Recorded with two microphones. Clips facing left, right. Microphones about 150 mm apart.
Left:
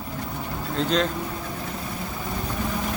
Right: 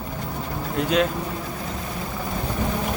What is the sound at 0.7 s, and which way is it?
Speech, 10° right (ahead or behind).